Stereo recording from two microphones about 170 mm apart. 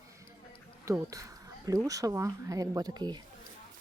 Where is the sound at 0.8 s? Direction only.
20° right (ahead or behind).